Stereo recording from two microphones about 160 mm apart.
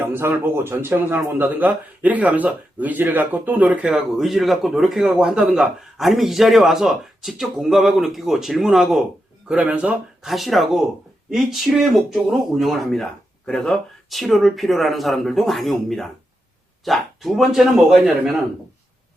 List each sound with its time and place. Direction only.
0.1 s speech: 15° right (ahead or behind)